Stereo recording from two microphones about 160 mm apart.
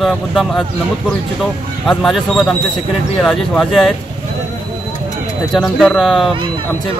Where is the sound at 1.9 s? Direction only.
Centre (ahead or behind).